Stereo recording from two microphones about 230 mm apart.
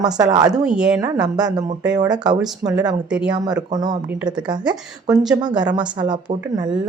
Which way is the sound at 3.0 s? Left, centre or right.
Centre.